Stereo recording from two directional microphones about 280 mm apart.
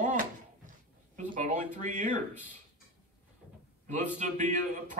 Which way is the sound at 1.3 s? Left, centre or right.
Right.